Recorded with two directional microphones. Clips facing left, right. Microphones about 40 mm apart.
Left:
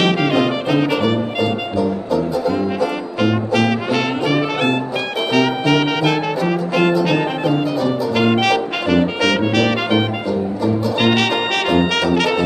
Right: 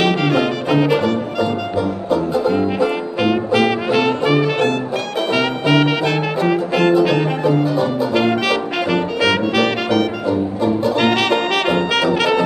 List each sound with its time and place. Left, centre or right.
0.0 s music: centre
2.0 s music: right
3.2 s brass instrument: centre
5.3 s music: centre
8.5 s brass instrument: centre
11.0 s music: centre
11.9 s brass instrument: centre